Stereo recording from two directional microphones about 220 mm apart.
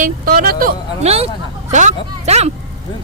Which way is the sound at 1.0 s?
25° right (ahead or behind).